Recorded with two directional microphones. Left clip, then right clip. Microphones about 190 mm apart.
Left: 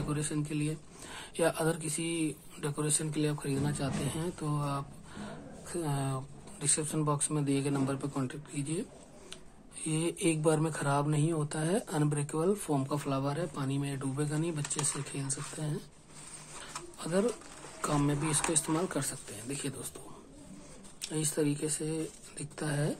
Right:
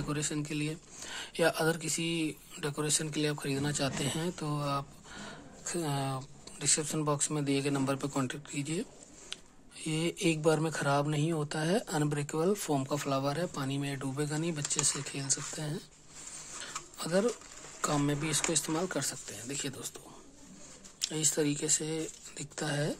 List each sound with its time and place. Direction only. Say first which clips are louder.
0.1 s speech: right 1 dB; 30° right (ahead or behind)
9.8 s speech: even; 25° right (ahead or behind)
17.0 s speech: right 1 dB; 30° right (ahead or behind)
21.0 s speech: right 1 dB; 25° right (ahead or behind)